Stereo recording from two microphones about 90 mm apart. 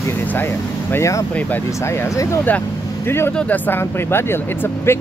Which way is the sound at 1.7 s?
30° left (ahead or behind).